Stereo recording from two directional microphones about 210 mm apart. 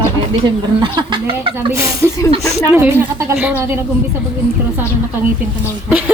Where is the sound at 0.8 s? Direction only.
25° right (ahead or behind).